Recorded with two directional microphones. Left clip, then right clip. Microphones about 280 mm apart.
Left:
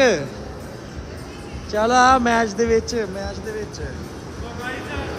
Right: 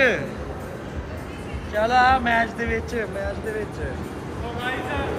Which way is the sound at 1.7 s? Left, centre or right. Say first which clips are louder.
Left 3 dB; left.